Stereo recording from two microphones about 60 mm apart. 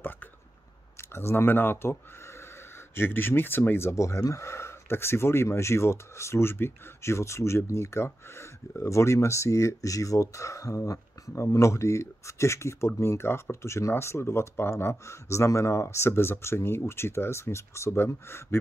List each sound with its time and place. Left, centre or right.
1.1 s speech: left
3.0 s speech: left
4.0 s speech: left